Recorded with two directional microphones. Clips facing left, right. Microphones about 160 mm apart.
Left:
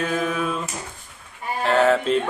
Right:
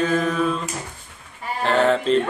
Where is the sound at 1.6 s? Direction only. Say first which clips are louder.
Even; 5° left (ahead or behind).